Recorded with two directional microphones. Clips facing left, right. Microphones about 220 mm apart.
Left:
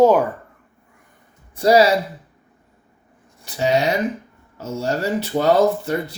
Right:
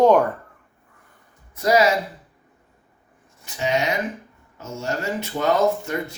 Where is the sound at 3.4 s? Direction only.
35° left (ahead or behind).